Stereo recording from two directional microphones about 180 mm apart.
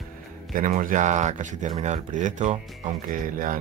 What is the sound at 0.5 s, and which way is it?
Speech, 50° right (ahead or behind).